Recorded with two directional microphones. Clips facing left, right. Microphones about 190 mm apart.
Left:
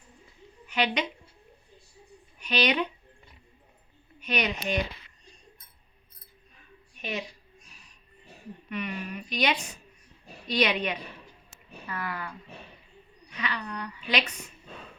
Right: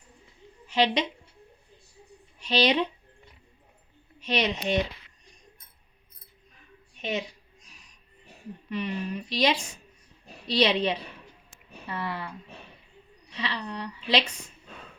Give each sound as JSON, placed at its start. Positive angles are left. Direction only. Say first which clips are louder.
{"t": 0.7, "sound": "a woman's voice", "louder": "right 4 dB", "side_deg": -30}
{"t": 2.4, "sound": "a woman's voice", "louder": "right 3 dB", "side_deg": -25}
{"t": 4.2, "sound": "a woman's voice", "louder": "right 2 dB", "side_deg": -25}
{"t": 7.0, "sound": "a woman's voice", "louder": "right 4 dB", "side_deg": -20}
{"t": 8.7, "sound": "a woman's voice", "louder": "right 3 dB", "side_deg": -30}
{"t": 13.3, "sound": "a woman's voice", "louder": "right 1 dB", "side_deg": -30}